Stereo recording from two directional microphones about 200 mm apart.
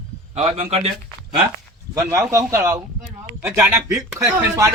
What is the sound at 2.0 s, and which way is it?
Speech, 15° right (ahead or behind).